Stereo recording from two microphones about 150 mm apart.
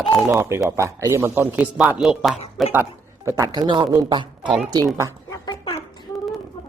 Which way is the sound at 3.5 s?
30° right (ahead or behind).